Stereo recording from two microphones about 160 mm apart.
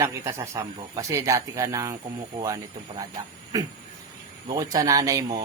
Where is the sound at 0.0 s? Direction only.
15° right (ahead or behind).